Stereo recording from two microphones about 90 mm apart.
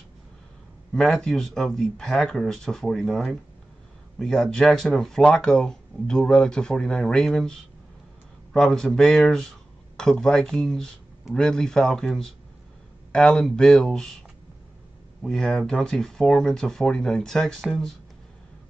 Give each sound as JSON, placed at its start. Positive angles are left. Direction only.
{"t": 0.9, "sound": "speech", "side_deg": 5}
{"t": 15.2, "sound": "speech", "side_deg": 5}